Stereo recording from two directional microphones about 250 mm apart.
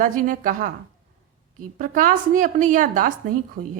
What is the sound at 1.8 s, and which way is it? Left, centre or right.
A woman's voice, right.